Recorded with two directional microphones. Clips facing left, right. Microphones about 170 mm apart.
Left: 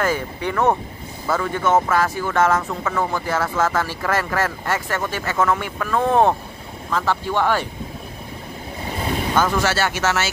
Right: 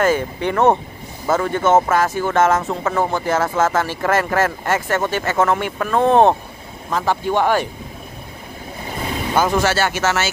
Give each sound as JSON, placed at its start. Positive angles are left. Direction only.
{"t": 0.0, "sound": "speech", "side_deg": -25}
{"t": 1.3, "sound": "speech", "side_deg": -35}
{"t": 2.1, "sound": "speech", "side_deg": -25}
{"t": 3.3, "sound": "speech", "side_deg": -45}
{"t": 3.7, "sound": "speech", "side_deg": -25}
{"t": 4.0, "sound": "speech", "side_deg": -45}
{"t": 4.9, "sound": "speech", "side_deg": -25}
{"t": 5.2, "sound": "speech", "side_deg": -45}
{"t": 5.5, "sound": "speech", "side_deg": -25}
{"t": 9.3, "sound": "speech", "side_deg": -15}
{"t": 9.8, "sound": "speech", "side_deg": -45}